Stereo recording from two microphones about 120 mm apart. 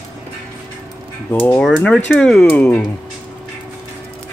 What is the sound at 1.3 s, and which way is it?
Speech, 15° left (ahead or behind).